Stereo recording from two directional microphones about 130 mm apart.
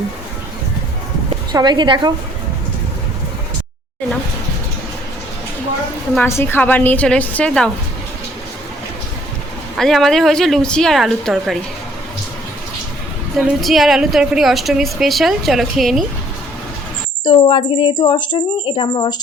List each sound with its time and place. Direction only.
1.5 s a woman's voice: 35° right (ahead or behind)
6.2 s a woman's voice: 20° left (ahead or behind)
9.7 s a woman's voice: 5° left (ahead or behind)
13.6 s a woman's voice: centre (ahead or behind)
17.2 s a woman's voice: 40° left (ahead or behind)